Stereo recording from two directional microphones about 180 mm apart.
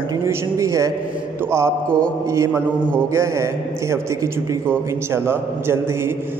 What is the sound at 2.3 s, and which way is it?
A man's voice, 15° right (ahead or behind).